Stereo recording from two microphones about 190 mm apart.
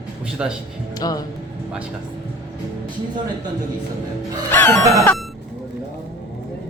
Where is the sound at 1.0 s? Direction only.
20° left (ahead or behind).